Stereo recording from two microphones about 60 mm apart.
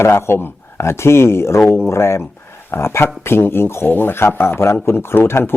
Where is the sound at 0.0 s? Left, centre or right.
Left.